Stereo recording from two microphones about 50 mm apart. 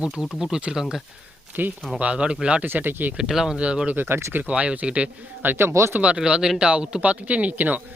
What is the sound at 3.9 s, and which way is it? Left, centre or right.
Speech, right.